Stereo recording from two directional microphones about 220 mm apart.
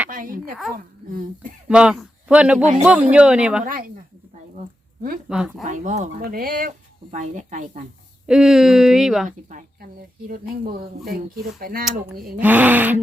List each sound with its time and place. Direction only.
0.1 s a woman's voice: 40° right (ahead or behind)
1.6 s a man's voice: 5° right (ahead or behind)
5.3 s speech: 5° right (ahead or behind)
5.6 s speech: 35° right (ahead or behind)
8.3 s speech: centre (ahead or behind)
9.5 s speech: 40° right (ahead or behind)
12.4 s speech: 5° right (ahead or behind)